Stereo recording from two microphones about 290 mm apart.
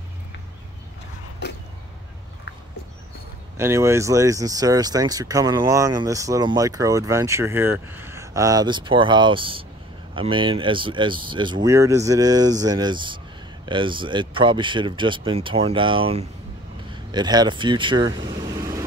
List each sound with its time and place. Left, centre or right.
3.5 s speech: centre
18.1 s vehicle: centre